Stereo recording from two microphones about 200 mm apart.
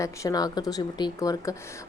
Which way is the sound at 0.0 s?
15° left (ahead or behind).